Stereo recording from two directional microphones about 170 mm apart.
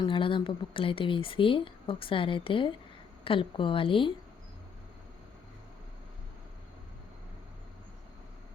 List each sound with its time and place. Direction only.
0.0 s speech: 30° left (ahead or behind)